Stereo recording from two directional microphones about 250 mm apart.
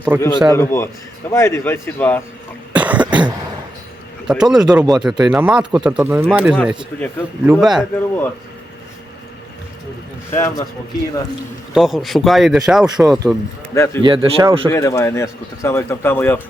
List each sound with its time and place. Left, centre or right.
0.1 s a man's voice: centre
0.5 s speech: centre
2.7 s cough: centre
4.3 s speech: centre
10.3 s speech: centre
11.7 s speech: centre
13.7 s speech: centre
14.0 s speech: centre
14.7 s speech: centre